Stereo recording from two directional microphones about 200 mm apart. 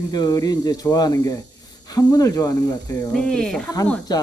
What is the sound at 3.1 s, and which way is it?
Speech, 5° left (ahead or behind).